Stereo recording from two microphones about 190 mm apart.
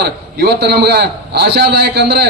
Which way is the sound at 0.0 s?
60° right (ahead or behind).